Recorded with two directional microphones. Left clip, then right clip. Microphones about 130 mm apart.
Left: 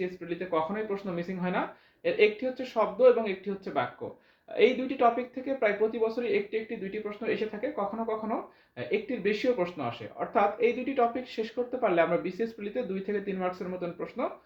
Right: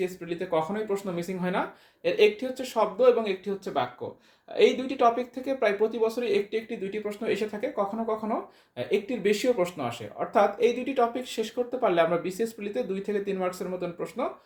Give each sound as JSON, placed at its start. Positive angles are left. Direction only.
{"t": 0.3, "sound": "speech", "side_deg": -50}
{"t": 0.9, "sound": "speech", "side_deg": -40}
{"t": 8.9, "sound": "speech", "side_deg": -55}